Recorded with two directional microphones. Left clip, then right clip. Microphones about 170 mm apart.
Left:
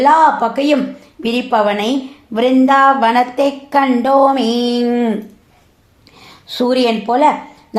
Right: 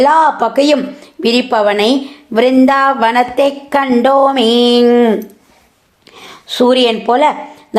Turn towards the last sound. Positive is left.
turn(degrees=-25)  # may be behind; listen again after turning